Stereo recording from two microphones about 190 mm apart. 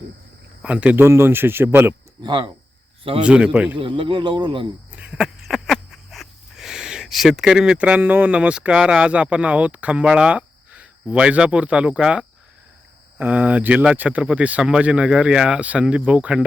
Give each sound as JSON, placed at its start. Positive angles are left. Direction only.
{"t": 0.6, "sound": "speech", "side_deg": -5}
{"t": 2.2, "sound": "speech", "side_deg": -25}
{"t": 3.2, "sound": "a man's voice", "side_deg": -5}
{"t": 3.8, "sound": "speech", "side_deg": -25}
{"t": 4.9, "sound": "wheeze", "side_deg": -5}
{"t": 13.1, "sound": "speech", "side_deg": -10}